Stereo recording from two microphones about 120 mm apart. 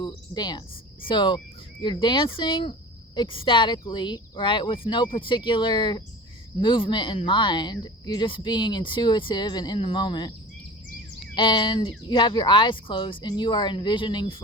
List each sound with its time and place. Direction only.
0.0 s cricket: 40° left (ahead or behind)
1.0 s speech: 40° left (ahead or behind)
11.3 s speech: 40° left (ahead or behind)